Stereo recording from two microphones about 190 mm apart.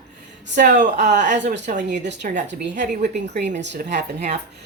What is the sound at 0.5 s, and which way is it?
Speech, 40° right (ahead or behind).